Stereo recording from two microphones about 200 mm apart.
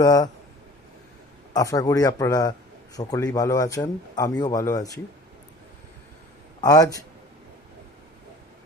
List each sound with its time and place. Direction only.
0.0 s a man's voice: 15° left (ahead or behind)
1.5 s a man's voice: 20° left (ahead or behind)
6.6 s a man's voice: 15° left (ahead or behind)